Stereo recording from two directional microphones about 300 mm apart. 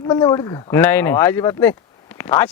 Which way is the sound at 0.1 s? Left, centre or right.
Centre.